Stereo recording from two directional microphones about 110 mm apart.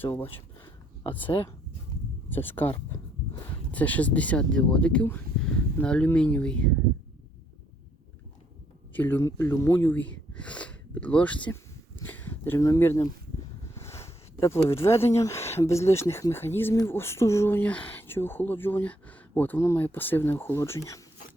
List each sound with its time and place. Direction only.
0.0 s speech: 20° left (ahead or behind)
2.3 s speech: 15° left (ahead or behind)
8.9 s speech: 15° left (ahead or behind)
12.0 s a sound: 20° left (ahead or behind)
13.7 s speech: 25° left (ahead or behind)